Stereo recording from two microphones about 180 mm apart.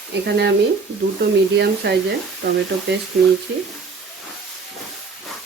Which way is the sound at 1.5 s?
70° right (ahead or behind).